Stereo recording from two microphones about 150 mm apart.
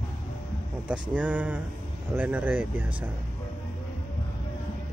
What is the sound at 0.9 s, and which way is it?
Speech, 10° right (ahead or behind).